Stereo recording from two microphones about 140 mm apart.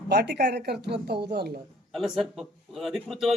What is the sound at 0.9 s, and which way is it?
Speech, 40° right (ahead or behind).